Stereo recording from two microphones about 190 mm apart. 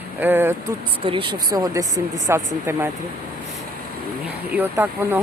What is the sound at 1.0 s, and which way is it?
Speech, 25° right (ahead or behind).